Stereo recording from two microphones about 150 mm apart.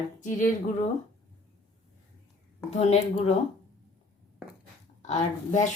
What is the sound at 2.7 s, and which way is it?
Speech, 50° left (ahead or behind).